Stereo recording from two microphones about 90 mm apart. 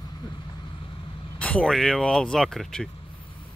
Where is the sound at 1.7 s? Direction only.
5° left (ahead or behind).